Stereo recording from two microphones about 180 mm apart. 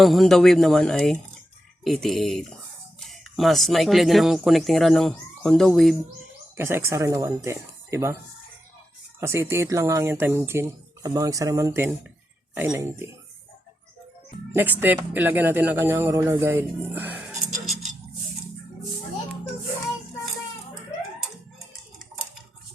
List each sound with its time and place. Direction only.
0.0 s speech: centre (ahead or behind)
6.6 s speech: 15° right (ahead or behind)
9.2 s speech: 15° right (ahead or behind)
14.5 s speech: 10° right (ahead or behind)